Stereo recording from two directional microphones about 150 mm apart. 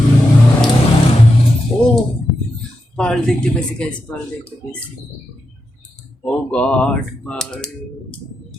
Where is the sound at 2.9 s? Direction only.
5° left (ahead or behind).